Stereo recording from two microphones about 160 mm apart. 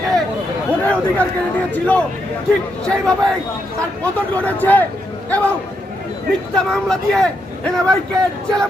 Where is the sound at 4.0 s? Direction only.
10° left (ahead or behind).